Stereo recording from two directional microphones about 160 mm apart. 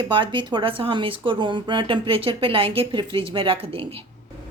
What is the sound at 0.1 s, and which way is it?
Speech, 30° right (ahead or behind).